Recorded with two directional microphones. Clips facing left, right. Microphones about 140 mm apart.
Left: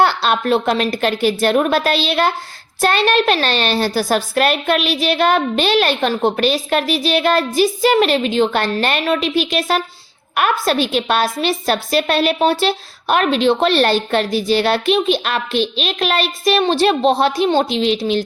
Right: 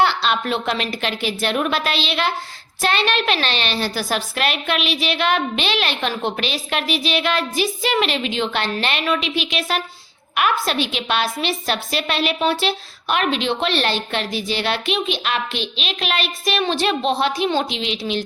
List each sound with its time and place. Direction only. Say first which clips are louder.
0.0 s a child's voice: left 3 dB; 45° left (ahead or behind)